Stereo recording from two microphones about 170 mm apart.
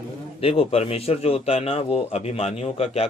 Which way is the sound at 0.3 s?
35° left (ahead or behind).